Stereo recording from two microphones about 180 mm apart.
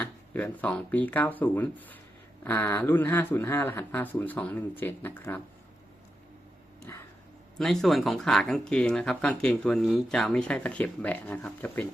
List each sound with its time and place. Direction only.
0.0 s speech: 10° left (ahead or behind)
6.9 s a sound: 15° left (ahead or behind)
7.5 s speech: centre (ahead or behind)